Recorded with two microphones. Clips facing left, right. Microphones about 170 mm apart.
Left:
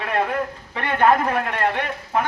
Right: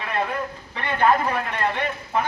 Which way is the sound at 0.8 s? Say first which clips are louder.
Left 2 dB; 55° left (ahead or behind).